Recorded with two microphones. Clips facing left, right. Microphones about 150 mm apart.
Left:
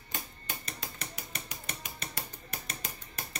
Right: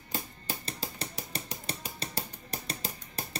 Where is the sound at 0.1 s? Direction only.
35° right (ahead or behind).